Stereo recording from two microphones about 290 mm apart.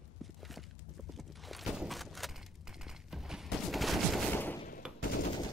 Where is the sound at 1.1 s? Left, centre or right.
Centre.